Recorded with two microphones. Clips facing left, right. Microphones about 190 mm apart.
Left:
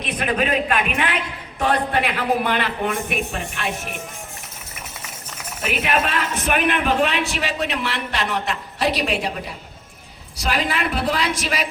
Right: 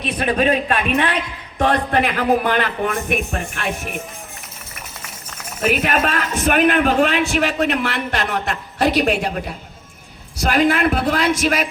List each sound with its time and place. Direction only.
0.0 s a man's voice: 30° right (ahead or behind)
1.5 s a man's voice: 45° right (ahead or behind)
5.6 s a man's voice: 45° right (ahead or behind)
10.4 s a man's voice: 50° right (ahead or behind)